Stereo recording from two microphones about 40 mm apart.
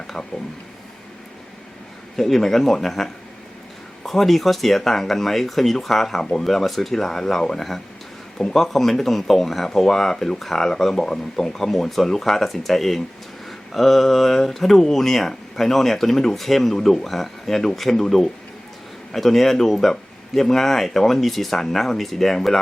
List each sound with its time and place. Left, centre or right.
2.1 s speech: centre